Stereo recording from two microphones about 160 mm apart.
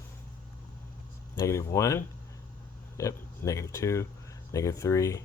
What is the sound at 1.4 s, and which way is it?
Speech, 20° left (ahead or behind).